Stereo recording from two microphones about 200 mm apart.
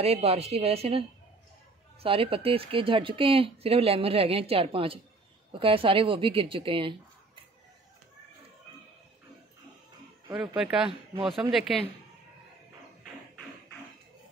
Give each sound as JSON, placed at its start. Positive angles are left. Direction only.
{"t": 0.0, "sound": "a woman's voice", "side_deg": -30}
{"t": 2.0, "sound": "speech", "side_deg": -25}
{"t": 10.3, "sound": "speech", "side_deg": -5}